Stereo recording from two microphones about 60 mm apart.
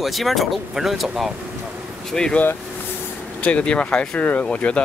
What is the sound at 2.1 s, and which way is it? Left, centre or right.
Speech, centre.